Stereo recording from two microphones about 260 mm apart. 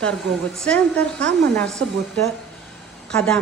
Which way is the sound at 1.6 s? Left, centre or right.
Centre.